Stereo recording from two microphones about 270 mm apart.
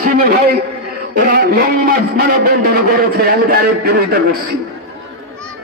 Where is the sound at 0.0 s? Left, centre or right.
Right.